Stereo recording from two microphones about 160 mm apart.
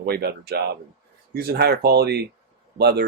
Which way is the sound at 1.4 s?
80° right.